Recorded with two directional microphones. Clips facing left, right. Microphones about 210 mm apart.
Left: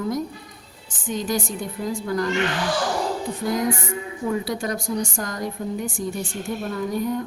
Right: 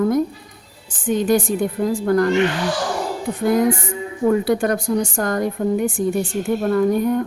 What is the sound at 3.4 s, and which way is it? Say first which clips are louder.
A woman's voice: right 8 dB; 60° right (ahead or behind).